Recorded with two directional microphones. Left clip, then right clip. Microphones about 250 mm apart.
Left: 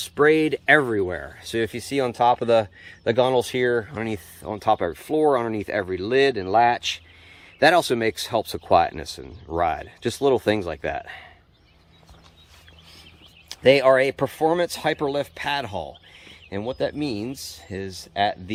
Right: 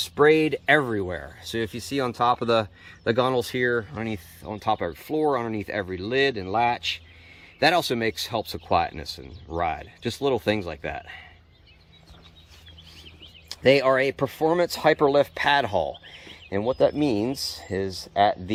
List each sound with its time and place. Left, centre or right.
0.0 s speech: centre
13.5 s speech: centre